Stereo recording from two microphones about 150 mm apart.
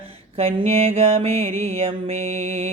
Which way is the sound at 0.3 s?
40° right (ahead or behind).